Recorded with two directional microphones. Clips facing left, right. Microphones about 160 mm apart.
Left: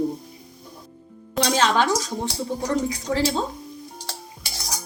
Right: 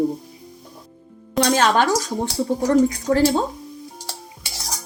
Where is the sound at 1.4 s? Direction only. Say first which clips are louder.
Right 3 dB; 50° right (ahead or behind).